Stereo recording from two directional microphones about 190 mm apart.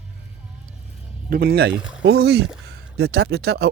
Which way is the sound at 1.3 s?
55° right (ahead or behind).